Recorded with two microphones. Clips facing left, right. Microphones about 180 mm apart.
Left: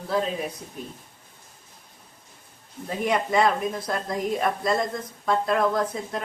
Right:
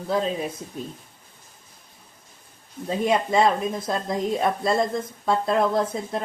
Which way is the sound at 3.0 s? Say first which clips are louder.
Right 2 dB; 25° right (ahead or behind).